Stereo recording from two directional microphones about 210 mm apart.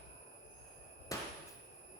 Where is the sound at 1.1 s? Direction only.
15° left (ahead or behind).